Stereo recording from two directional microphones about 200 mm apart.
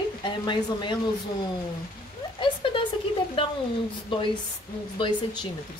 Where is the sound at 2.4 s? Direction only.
25° left (ahead or behind).